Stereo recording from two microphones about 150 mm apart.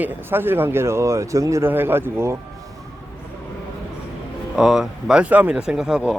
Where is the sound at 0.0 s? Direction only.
15° right (ahead or behind).